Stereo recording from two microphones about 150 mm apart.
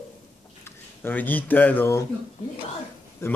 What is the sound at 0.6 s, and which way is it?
Speech, 10° left (ahead or behind).